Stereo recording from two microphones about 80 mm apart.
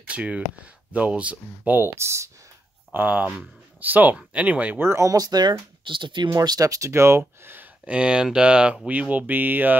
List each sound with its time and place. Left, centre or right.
0.0 s speech: centre
0.9 s a sound: centre
2.0 s speech: right
2.9 s speech: right
3.8 s a sound: right
4.7 s speech: right
5.1 s speech: right
6.4 s speech: right
7.8 s speech: centre
8.8 s a sound: centre